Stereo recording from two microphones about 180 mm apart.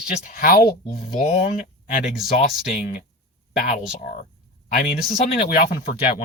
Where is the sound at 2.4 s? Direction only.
50° left (ahead or behind).